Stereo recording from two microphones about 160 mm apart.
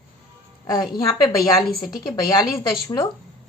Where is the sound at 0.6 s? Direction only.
25° left (ahead or behind).